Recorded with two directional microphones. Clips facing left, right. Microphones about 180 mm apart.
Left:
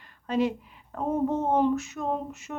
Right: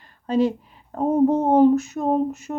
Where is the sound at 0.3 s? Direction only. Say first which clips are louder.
Right 6 dB; 35° right (ahead or behind).